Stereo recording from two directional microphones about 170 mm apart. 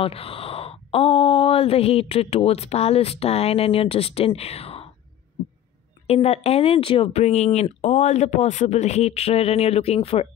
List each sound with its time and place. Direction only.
0.0 s speech: 35° left (ahead or behind)
6.0 s speech: 40° left (ahead or behind)